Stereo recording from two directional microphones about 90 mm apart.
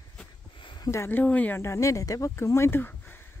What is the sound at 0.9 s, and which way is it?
Speech, 25° left (ahead or behind).